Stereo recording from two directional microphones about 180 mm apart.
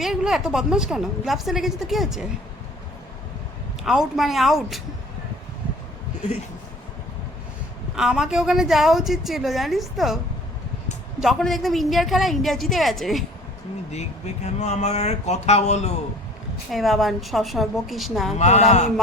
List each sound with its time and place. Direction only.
0.0 s a woman's voice: 5° right (ahead or behind)
3.8 s a woman's voice: centre (ahead or behind)
7.9 s a woman's voice: 5° right (ahead or behind)
11.2 s a woman's voice: centre (ahead or behind)
13.9 s speech: 40° left (ahead or behind)
16.7 s a woman's voice: centre (ahead or behind)
18.3 s speech: 40° left (ahead or behind)